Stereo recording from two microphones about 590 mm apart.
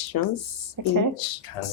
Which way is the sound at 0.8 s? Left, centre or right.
Right.